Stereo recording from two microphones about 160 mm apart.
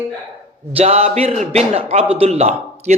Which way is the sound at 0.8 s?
40° right (ahead or behind).